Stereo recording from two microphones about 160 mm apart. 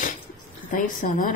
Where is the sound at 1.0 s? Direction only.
60° left (ahead or behind).